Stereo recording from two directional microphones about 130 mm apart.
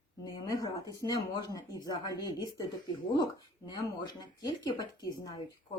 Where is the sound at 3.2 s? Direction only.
35° left (ahead or behind).